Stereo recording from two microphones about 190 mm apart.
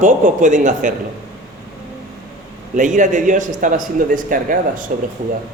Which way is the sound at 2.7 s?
40° right (ahead or behind).